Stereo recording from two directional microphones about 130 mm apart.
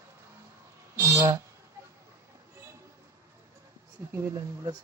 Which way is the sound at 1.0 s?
25° right (ahead or behind).